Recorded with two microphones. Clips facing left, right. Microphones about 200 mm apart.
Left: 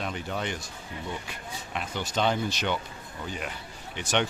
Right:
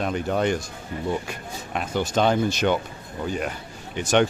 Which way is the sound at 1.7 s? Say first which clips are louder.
Right 7 dB; 50° right (ahead or behind).